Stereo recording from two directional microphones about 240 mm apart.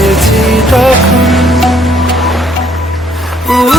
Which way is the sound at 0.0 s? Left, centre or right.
Centre.